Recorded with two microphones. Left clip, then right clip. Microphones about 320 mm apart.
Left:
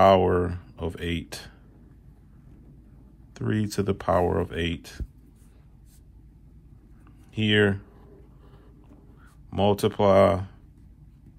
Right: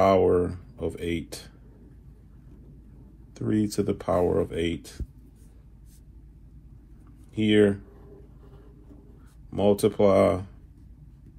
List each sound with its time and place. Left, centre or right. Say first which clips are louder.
0.0 s a sound: left 2 dB; left
3.3 s speech: right 2 dB; left
7.3 s speech: right 1 dB; left
9.5 s speech: right 1 dB; left